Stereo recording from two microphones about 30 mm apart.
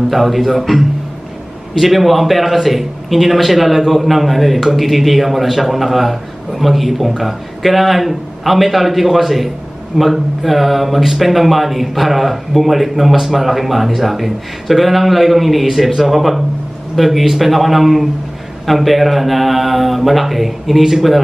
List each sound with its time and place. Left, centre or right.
0.1 s speech: centre